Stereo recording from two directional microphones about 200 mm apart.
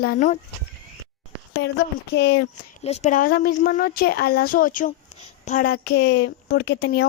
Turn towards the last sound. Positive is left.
turn(degrees=65)  # may be behind; listen again after turning